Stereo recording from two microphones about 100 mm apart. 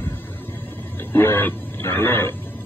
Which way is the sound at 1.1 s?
25° left (ahead or behind).